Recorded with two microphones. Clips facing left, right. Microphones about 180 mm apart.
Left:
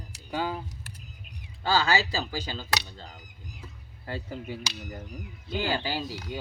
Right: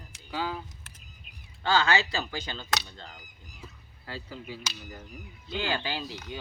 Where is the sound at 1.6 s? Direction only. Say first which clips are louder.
Even; 35° left (ahead or behind).